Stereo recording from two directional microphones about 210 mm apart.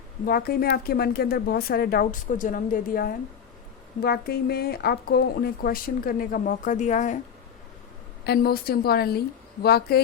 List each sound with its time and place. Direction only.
0.3 s speech: 45° left (ahead or behind)
8.2 s speech: 45° left (ahead or behind)